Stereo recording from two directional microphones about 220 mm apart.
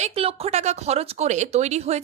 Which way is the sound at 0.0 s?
25° right (ahead or behind).